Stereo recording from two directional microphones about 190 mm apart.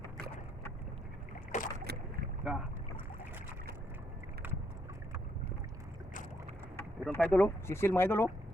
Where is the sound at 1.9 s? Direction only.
55° right (ahead or behind).